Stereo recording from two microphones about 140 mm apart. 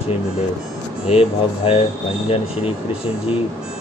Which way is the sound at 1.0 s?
45° left (ahead or behind).